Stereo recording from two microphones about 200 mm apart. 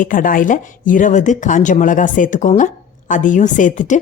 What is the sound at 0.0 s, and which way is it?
Speech, 40° left (ahead or behind).